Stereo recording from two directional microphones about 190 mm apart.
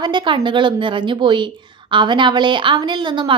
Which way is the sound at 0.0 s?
25° right (ahead or behind).